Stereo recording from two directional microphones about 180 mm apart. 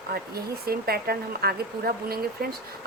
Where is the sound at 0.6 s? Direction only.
60° right (ahead or behind).